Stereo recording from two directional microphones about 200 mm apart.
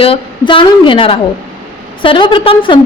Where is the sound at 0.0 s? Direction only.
25° left (ahead or behind).